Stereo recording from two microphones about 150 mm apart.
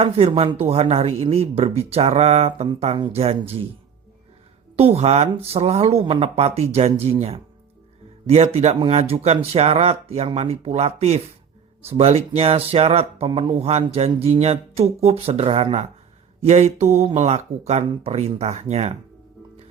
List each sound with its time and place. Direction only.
0.0 s speech: 40° right (ahead or behind)
2.6 s speech: 35° right (ahead or behind)
4.8 s speech: 45° right (ahead or behind)